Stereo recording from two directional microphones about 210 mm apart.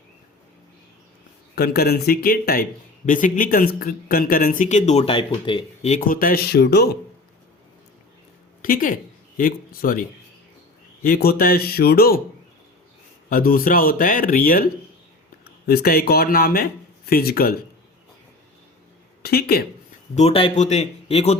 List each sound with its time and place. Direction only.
1.5 s speech: 50° left (ahead or behind)
8.6 s speech: 40° left (ahead or behind)
13.3 s speech: 45° left (ahead or behind)
19.2 s speech: 45° left (ahead or behind)
20.1 s speech: 30° left (ahead or behind)